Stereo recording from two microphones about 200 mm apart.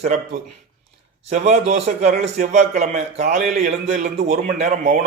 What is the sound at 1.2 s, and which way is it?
A man's voice, 35° right (ahead or behind).